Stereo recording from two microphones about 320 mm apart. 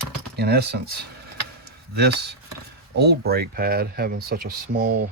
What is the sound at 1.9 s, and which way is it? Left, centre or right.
Speech, right.